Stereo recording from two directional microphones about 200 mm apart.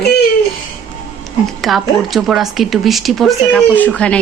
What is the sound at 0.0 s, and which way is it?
Music, 55° left (ahead or behind).